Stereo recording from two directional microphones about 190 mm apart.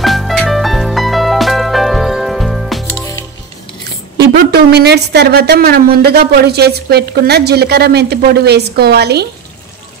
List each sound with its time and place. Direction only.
0.0 s music: centre (ahead or behind)
4.2 s a woman's voice: 55° right (ahead or behind)